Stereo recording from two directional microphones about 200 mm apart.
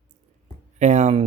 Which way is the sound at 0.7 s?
35° right (ahead or behind).